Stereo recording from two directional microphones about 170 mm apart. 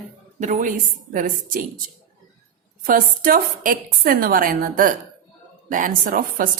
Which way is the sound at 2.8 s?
55° right (ahead or behind).